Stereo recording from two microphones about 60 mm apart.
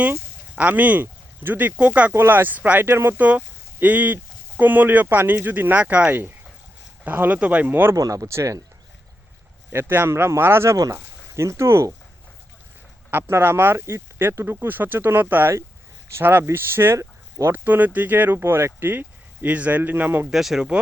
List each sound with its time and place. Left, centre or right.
0.5 s speech: right
2.1 s speech: right
2.8 s speech: right
3.2 s speech: right
7.7 s speech: right
7.9 s speech: right
9.7 s speech: right
13.1 s speech: right
17.0 s a sound: right
17.5 s speech: right
20.3 s speech: centre